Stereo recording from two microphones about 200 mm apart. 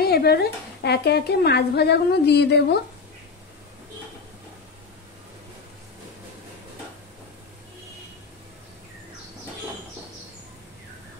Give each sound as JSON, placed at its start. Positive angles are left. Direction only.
{"t": 0.0, "sound": "speech", "side_deg": 50}